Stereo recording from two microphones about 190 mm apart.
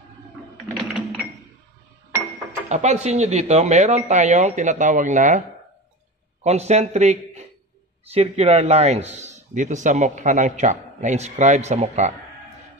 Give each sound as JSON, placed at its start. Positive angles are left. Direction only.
{"t": 2.7, "sound": "speech", "side_deg": -35}
{"t": 6.4, "sound": "a man's voice", "side_deg": -35}